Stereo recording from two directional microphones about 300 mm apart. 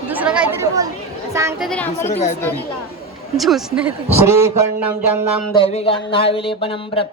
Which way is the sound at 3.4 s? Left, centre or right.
Centre.